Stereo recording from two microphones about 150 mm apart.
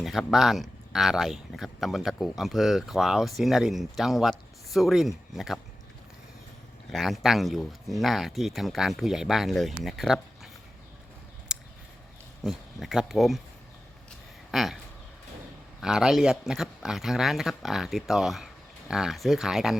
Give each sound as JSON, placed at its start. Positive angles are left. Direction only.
{"t": 0.0, "sound": "speech", "side_deg": 0}
{"t": 6.9, "sound": "speech", "side_deg": 0}
{"t": 11.5, "sound": "a sound", "side_deg": -5}
{"t": 12.4, "sound": "speech", "side_deg": 0}
{"t": 14.5, "sound": "speech", "side_deg": 0}
{"t": 15.8, "sound": "speech", "side_deg": -5}